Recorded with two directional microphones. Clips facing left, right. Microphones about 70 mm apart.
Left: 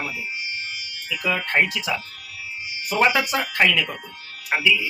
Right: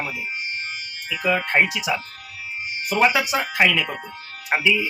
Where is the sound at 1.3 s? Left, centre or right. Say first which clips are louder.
Right 2 dB; centre.